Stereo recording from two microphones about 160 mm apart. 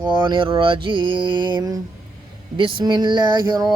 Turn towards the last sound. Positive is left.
turn(degrees=-25)  # may be behind; listen again after turning